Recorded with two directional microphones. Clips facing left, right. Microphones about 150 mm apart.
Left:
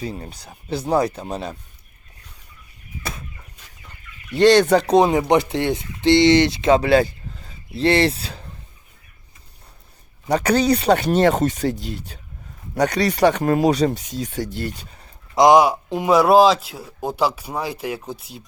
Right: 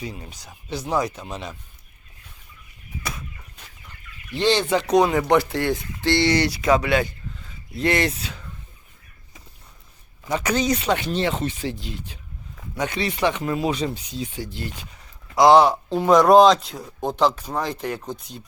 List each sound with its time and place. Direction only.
0.0 s speech: 35° left (ahead or behind)
3.0 s chicken: 30° left (ahead or behind)
4.6 s speech: 40° left (ahead or behind)
4.9 s speech: 20° left (ahead or behind)
10.3 s speech: 35° left (ahead or behind); by 13.7 s 55° left (ahead or behind)
13.7 s speech: 40° left (ahead or behind)
15.4 s speech: 15° left (ahead or behind)